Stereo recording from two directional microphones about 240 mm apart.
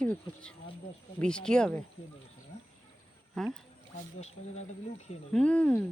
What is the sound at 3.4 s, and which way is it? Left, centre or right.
Speech, centre.